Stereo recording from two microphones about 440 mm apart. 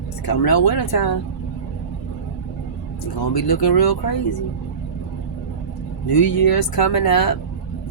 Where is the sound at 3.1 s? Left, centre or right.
Left.